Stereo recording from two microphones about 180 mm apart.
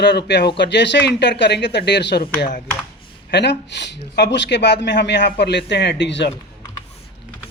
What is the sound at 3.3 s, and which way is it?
Speech, 70° left (ahead or behind).